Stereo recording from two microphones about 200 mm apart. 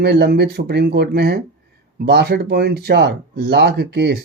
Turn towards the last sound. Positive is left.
turn(degrees=-55)  # may be behind; listen again after turning